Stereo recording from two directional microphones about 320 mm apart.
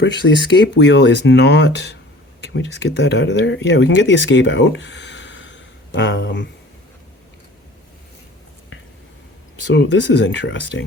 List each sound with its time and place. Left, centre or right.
0.0 s speech: left
9.6 s speech: left